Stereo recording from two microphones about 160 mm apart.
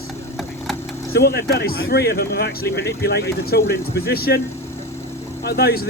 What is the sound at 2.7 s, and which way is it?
Speech, 90° left.